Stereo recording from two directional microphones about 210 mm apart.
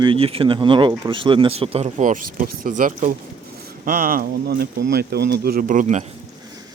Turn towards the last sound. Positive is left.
turn(degrees=-35)  # may be behind; listen again after turning